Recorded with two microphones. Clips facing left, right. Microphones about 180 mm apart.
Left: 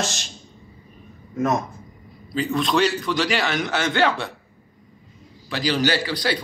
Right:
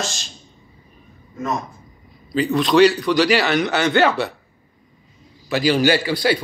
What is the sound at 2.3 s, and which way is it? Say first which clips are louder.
A man's voice: right 6 dB; centre (ahead or behind).